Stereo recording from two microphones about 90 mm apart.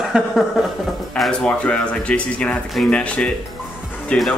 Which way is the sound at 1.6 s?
15° left (ahead or behind).